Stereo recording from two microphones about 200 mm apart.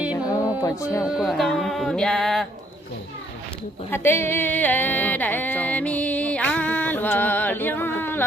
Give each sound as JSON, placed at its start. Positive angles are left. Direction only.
{"t": 0.6, "sound": "speech", "side_deg": 15}
{"t": 1.0, "sound": "music", "side_deg": 0}
{"t": 3.9, "sound": "speech", "side_deg": 10}